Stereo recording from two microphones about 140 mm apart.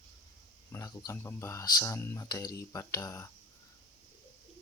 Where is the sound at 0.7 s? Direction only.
25° left (ahead or behind).